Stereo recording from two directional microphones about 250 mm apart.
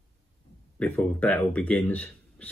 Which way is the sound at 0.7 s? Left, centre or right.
Centre.